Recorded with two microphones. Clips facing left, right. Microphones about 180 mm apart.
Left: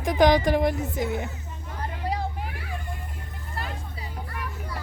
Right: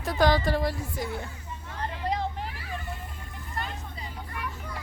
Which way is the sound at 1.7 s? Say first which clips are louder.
Even; 10° left (ahead or behind).